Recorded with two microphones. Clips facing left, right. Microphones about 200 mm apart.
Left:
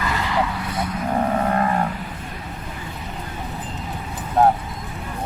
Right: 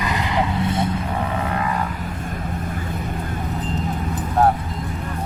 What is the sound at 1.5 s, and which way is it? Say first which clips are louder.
Vehicle: left 3 dB; 45° left (ahead or behind).